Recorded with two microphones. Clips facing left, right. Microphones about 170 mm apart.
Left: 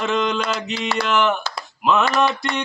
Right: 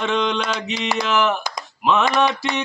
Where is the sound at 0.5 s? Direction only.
15° right (ahead or behind).